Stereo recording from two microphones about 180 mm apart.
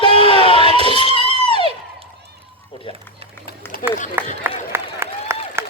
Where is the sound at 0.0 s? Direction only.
30° left (ahead or behind).